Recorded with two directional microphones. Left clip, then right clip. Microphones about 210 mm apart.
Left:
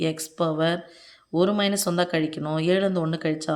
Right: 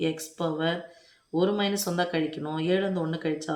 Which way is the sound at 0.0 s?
45° left (ahead or behind).